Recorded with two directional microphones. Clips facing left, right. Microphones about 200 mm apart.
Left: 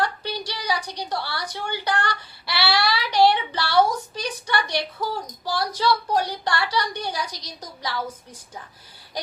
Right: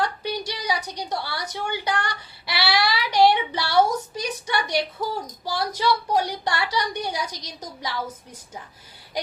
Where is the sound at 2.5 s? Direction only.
20° right (ahead or behind).